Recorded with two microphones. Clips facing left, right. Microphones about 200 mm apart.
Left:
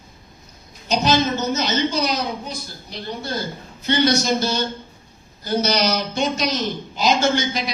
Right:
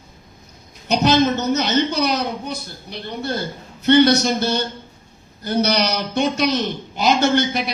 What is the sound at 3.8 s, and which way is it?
A man's voice, 60° right (ahead or behind).